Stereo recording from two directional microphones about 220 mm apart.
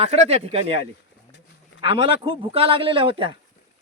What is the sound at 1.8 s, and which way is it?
A man's voice, 25° right (ahead or behind).